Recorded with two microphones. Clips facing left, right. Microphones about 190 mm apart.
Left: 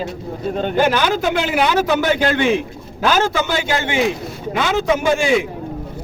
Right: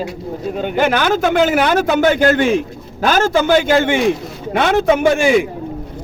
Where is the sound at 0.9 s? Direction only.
55° right (ahead or behind).